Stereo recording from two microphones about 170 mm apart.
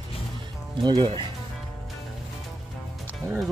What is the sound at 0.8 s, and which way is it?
Speech, 25° right (ahead or behind).